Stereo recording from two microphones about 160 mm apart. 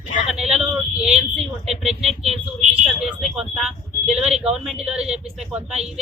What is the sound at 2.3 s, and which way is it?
Speech, 40° right (ahead or behind).